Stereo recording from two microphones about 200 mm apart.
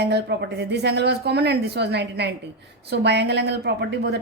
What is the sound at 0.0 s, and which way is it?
A woman's voice, 55° right (ahead or behind).